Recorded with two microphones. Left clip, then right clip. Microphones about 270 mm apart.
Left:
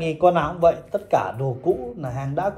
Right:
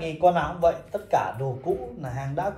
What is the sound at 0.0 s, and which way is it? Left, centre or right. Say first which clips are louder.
Speech: left 3 dB; centre.